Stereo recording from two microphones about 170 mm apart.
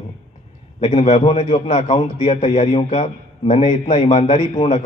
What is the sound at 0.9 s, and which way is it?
Speech, 45° left (ahead or behind).